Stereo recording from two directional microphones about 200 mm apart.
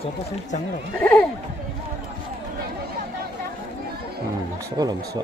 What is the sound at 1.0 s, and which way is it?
Speech, 10° left (ahead or behind).